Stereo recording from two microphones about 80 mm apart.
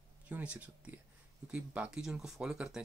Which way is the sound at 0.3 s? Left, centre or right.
Centre.